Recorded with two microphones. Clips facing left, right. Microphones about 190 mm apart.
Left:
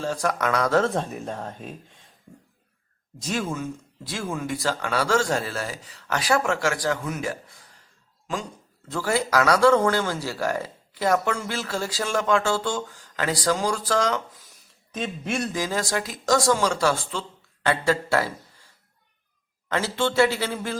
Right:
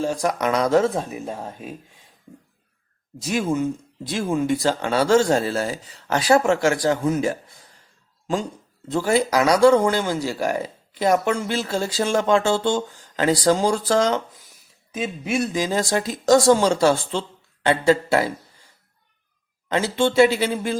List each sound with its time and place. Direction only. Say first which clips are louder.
0.0 s speech: right 3 dB; 15° right (ahead or behind)
0.9 s speech: right 2 dB; 5° right (ahead or behind)
3.2 s speech: right 4 dB; 10° right (ahead or behind)
3.4 s speech: right 7 dB; 20° right (ahead or behind)
8.9 s speech: right 4 dB; 20° right (ahead or behind)
14.9 s speech: right 4 dB; 5° right (ahead or behind)
15.5 s speech: right 4 dB; 20° right (ahead or behind)
19.6 s speech: right 4 dB; 20° right (ahead or behind)